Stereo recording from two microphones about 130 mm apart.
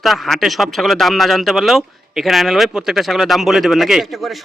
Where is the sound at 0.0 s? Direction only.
Centre (ahead or behind).